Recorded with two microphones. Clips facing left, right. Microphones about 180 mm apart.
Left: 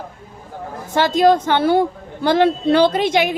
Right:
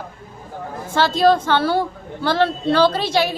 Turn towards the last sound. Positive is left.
turn(degrees=20)  # may be behind; listen again after turning